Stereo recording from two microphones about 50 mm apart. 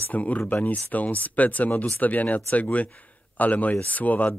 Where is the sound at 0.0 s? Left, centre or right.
Left.